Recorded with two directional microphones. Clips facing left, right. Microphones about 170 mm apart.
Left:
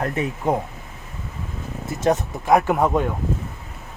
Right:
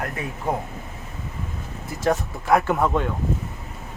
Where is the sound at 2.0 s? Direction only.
20° left (ahead or behind).